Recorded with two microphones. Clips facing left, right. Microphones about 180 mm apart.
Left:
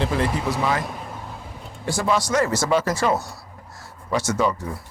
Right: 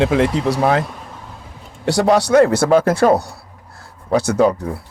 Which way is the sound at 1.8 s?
70° right (ahead or behind).